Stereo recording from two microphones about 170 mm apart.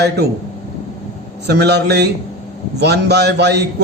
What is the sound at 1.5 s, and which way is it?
A man's voice, 80° right.